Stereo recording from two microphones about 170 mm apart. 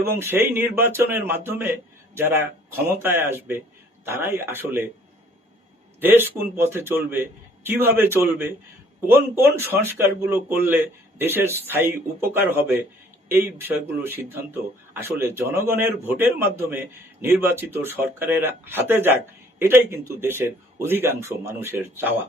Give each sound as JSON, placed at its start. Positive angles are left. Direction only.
{"t": 0.0, "sound": "speech", "side_deg": -15}
{"t": 6.0, "sound": "speech", "side_deg": -10}